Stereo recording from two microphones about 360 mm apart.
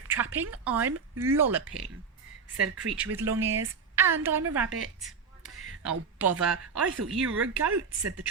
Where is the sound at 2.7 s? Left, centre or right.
Centre.